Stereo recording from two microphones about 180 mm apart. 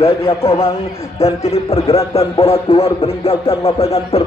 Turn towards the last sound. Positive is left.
turn(degrees=35)  # may be behind; listen again after turning